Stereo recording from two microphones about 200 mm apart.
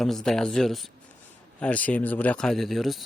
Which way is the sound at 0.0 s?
Centre (ahead or behind).